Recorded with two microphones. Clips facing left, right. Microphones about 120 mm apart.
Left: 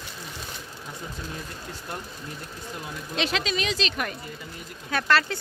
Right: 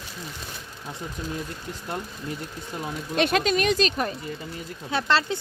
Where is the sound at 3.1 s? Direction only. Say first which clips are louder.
Right 6 dB; 50° right (ahead or behind).